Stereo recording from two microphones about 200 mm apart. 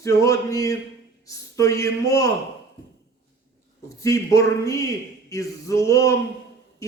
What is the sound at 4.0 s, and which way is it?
A man's voice, 15° left (ahead or behind).